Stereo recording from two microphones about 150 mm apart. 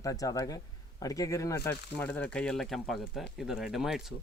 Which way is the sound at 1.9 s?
10° left (ahead or behind).